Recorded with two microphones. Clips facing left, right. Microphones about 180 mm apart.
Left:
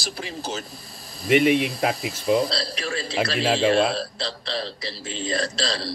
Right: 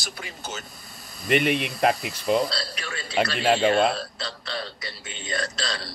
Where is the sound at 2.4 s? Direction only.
35° left (ahead or behind).